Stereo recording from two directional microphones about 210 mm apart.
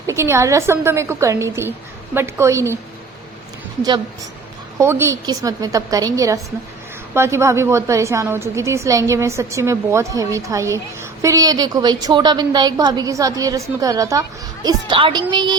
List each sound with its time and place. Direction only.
0.1 s a woman's voice: 15° right (ahead or behind)
4.8 s a woman's voice: 10° right (ahead or behind)